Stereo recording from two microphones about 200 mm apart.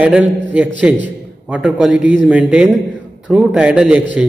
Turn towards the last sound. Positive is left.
turn(degrees=-5)  # may be behind; listen again after turning